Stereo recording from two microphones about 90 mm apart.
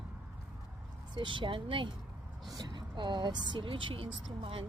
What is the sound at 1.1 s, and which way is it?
Speech, 60° right (ahead or behind).